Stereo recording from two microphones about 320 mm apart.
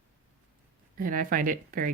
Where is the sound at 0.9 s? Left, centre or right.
Right.